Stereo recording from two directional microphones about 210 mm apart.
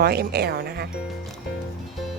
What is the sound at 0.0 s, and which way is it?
Speech, 50° right (ahead or behind).